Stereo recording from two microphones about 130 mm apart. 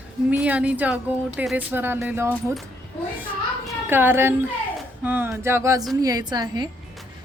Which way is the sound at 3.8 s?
15° right (ahead or behind).